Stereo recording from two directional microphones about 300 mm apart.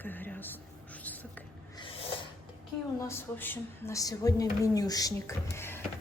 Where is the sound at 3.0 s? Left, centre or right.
Centre.